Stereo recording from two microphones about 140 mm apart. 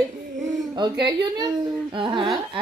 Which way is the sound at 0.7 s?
35° right (ahead or behind).